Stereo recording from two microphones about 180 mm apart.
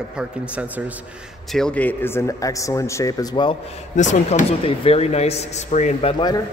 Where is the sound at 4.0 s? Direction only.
40° left (ahead or behind).